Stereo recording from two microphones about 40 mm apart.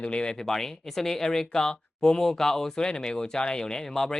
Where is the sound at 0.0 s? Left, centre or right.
Left.